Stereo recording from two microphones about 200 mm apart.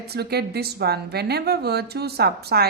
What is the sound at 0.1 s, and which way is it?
A woman's voice, 55° right (ahead or behind).